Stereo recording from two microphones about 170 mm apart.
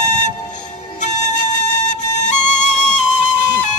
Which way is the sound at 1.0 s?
45° left (ahead or behind).